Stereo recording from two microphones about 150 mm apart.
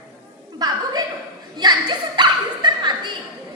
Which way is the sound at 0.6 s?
25° right (ahead or behind).